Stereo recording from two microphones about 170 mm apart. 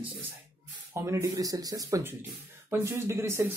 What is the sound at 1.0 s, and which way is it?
Speech, 15° right (ahead or behind).